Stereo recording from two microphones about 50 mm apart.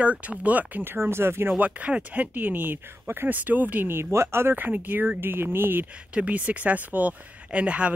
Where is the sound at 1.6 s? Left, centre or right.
Right.